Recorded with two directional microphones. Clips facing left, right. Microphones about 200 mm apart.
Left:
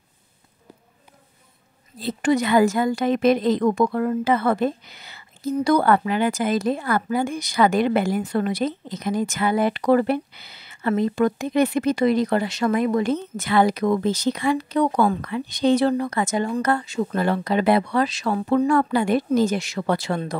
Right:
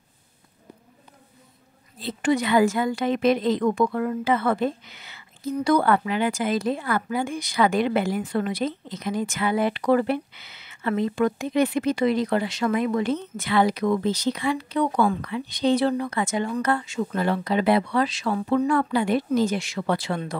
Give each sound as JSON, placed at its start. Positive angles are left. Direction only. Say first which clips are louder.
{"t": 2.0, "sound": "a woman's voice", "louder": "left 2 dB", "side_deg": 40}